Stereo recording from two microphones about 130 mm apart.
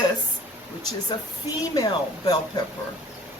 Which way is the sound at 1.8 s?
35° left (ahead or behind).